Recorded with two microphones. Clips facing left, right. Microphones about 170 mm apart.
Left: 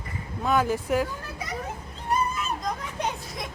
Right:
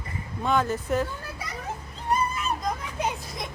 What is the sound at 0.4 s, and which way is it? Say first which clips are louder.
Speech: left 1 dB; 5° left (ahead or behind).